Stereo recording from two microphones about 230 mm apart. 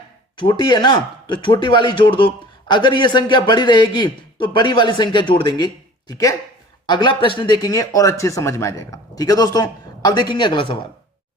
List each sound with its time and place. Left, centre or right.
0.3 s speech: centre